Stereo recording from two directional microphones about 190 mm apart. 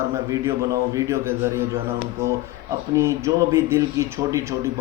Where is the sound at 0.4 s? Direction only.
15° right (ahead or behind).